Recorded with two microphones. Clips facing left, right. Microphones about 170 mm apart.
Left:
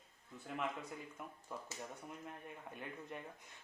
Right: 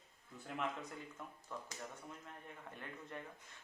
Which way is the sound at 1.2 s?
5° left (ahead or behind).